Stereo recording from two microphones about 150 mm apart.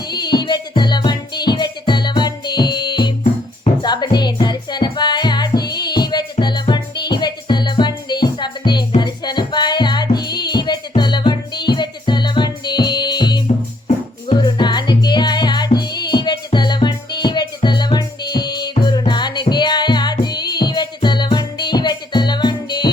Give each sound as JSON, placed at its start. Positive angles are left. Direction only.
{"t": 0.1, "sound": "music", "side_deg": 30}